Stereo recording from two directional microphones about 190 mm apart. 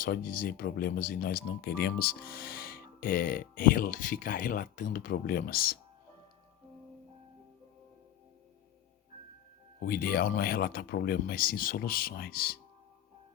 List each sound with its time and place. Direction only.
0.0 s speech: 50° left (ahead or behind)
9.8 s speech: 50° left (ahead or behind)